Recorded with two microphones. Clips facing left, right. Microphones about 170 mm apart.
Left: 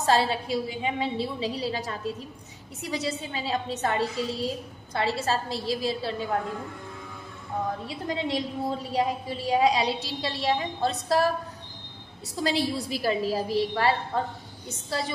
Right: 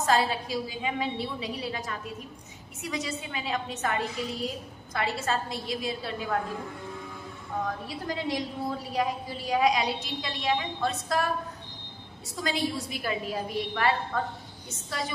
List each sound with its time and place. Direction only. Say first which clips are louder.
0.0 s a woman's voice: left 2 dB; 30° left (ahead or behind)
2.8 s a woman's voice: left 3 dB; 35° left (ahead or behind)
8.1 s a woman's voice: left 2 dB; 25° left (ahead or behind)
12.4 s a woman's voice: left 3 dB; 30° left (ahead or behind)